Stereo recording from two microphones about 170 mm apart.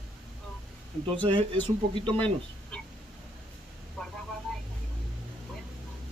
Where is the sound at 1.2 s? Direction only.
30° right (ahead or behind).